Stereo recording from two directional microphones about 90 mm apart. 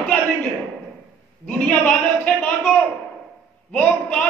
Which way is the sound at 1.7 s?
15° left (ahead or behind).